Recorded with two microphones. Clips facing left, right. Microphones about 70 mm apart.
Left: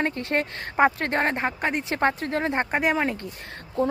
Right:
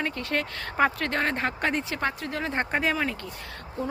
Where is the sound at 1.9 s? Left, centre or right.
Left.